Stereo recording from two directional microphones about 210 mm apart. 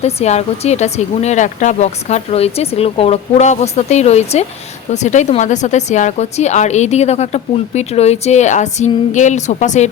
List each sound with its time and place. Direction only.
0.0 s speech: 30° left (ahead or behind)